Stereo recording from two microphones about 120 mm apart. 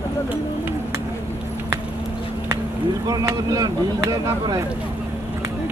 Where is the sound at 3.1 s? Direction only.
30° right (ahead or behind).